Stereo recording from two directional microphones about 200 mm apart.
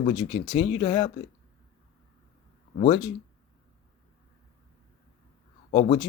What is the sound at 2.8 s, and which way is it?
Speech, 25° left (ahead or behind).